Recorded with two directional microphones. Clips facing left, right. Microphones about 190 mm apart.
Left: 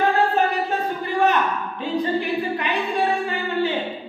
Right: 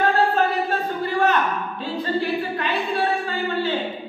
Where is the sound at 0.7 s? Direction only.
15° left (ahead or behind).